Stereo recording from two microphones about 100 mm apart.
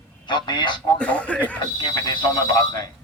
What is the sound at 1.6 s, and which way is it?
Speech, 45° left (ahead or behind).